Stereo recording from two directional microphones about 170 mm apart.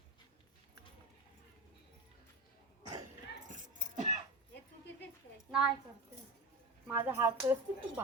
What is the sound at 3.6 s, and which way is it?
Keys jangling, 45° right (ahead or behind).